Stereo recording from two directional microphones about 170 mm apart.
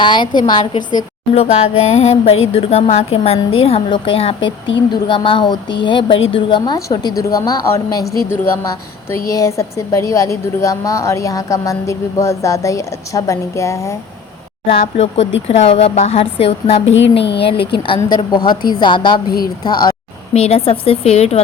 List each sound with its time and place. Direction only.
0.0 s speech: 25° left (ahead or behind)
1.4 s music: 40° left (ahead or behind)
4.9 s a woman's voice: 30° left (ahead or behind)
14.7 s music: 35° left (ahead or behind)
16.8 s speech: 90° left
17.8 s speech: 30° left (ahead or behind)
20.3 s music: 35° left (ahead or behind)